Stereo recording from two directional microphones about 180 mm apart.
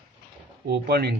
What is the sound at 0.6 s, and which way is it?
Speech, 65° right (ahead or behind).